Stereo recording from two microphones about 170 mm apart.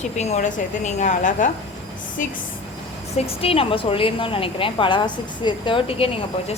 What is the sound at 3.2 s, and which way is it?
A woman's voice, 35° left (ahead or behind).